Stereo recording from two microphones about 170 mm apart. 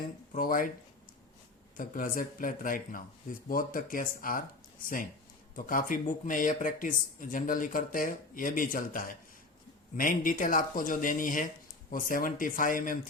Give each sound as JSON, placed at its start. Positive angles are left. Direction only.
{"t": 0.3, "sound": "speech", "side_deg": 55}
{"t": 1.7, "sound": "speech", "side_deg": 50}
{"t": 5.5, "sound": "speech", "side_deg": 55}